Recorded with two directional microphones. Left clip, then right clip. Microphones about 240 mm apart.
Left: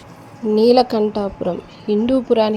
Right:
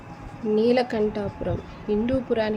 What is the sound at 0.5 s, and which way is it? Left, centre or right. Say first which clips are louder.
A woman's voice: left 8 dB; left.